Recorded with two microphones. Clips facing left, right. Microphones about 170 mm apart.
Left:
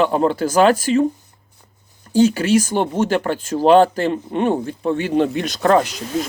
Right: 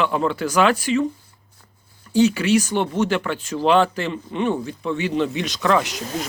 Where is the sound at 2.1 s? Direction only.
45° left (ahead or behind).